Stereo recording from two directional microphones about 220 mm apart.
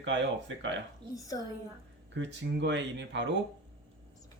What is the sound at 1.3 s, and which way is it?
Speech, 20° left (ahead or behind).